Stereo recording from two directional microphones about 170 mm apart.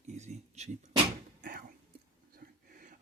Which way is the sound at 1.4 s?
55° right (ahead or behind).